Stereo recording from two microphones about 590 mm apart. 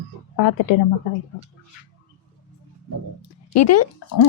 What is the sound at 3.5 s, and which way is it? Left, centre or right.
Speech, left.